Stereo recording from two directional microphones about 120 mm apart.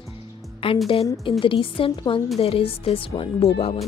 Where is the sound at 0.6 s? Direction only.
50° left (ahead or behind).